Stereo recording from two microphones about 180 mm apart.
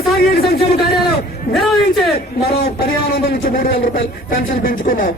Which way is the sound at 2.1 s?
60° left (ahead or behind).